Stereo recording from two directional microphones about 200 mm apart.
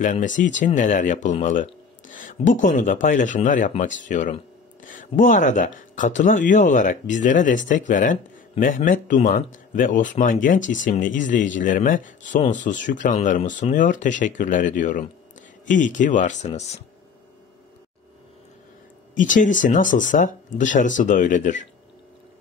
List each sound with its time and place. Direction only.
0.0 s speech: 40° left (ahead or behind)
19.1 s speech: 40° left (ahead or behind)